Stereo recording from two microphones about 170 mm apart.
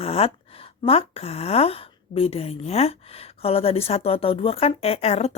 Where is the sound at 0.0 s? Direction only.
35° left (ahead or behind).